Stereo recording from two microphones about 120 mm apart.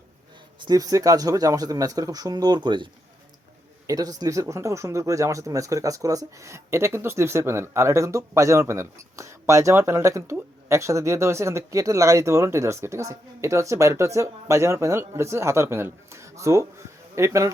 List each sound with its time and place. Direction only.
0.6 s speech: 30° right (ahead or behind)